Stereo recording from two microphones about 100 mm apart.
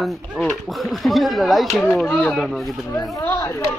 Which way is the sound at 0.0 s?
5° left (ahead or behind).